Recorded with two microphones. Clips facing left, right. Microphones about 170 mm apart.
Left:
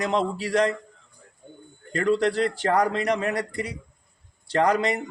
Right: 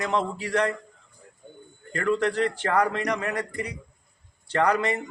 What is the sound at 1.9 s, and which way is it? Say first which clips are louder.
A man's voice: left 2 dB; 35° left (ahead or behind).